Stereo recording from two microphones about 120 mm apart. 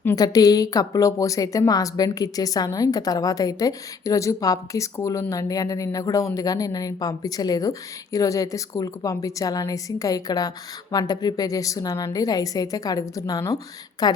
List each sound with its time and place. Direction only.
0.2 s a woman's voice: 30° left (ahead or behind)